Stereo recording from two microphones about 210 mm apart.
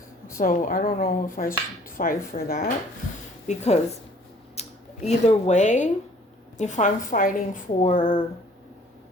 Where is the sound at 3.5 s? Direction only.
30° left (ahead or behind).